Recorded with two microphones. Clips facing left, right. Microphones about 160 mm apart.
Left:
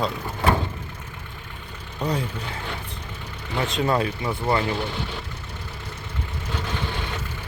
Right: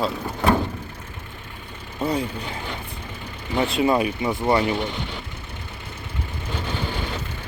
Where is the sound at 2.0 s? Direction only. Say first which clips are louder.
Right 2 dB; 10° right (ahead or behind).